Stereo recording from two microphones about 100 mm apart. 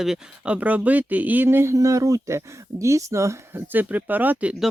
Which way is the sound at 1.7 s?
35° right (ahead or behind).